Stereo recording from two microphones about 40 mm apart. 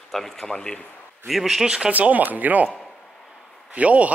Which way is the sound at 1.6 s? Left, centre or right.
Right.